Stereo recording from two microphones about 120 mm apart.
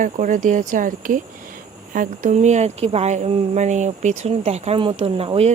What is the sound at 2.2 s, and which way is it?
Speech, 85° right.